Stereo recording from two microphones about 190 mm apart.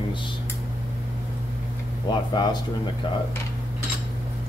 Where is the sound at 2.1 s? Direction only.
20° left (ahead or behind).